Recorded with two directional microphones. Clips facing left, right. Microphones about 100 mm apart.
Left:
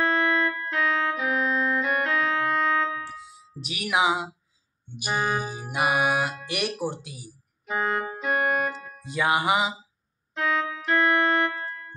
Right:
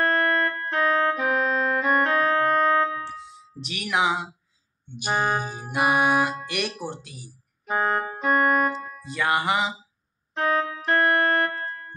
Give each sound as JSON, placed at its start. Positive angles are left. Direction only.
{"t": 0.0, "sound": "music", "side_deg": -50}
{"t": 3.3, "sound": "speech", "side_deg": 5}
{"t": 5.0, "sound": "music", "side_deg": -20}
{"t": 5.8, "sound": "music", "side_deg": -35}
{"t": 6.5, "sound": "speech", "side_deg": 10}
{"t": 7.6, "sound": "keyboard", "side_deg": -40}
{"t": 9.1, "sound": "speech", "side_deg": 10}
{"t": 10.3, "sound": "music", "side_deg": -40}